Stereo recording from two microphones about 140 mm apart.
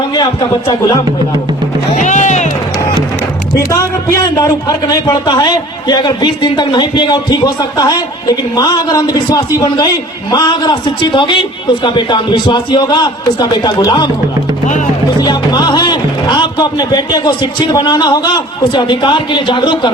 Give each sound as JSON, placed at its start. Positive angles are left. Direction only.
{"t": 2.0, "sound": "music", "side_deg": 60}
{"t": 3.7, "sound": "a man's voice", "side_deg": 25}
{"t": 15.2, "sound": "speech", "side_deg": 30}